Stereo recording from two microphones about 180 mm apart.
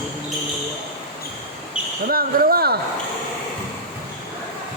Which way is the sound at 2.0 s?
55° right (ahead or behind).